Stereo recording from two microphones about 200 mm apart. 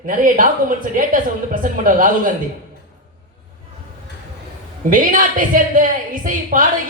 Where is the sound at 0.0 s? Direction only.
40° right (ahead or behind).